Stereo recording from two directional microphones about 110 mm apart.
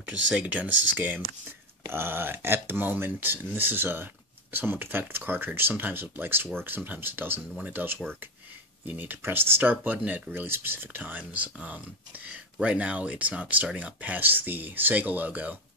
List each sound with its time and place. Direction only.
0.1 s speech: 15° right (ahead or behind)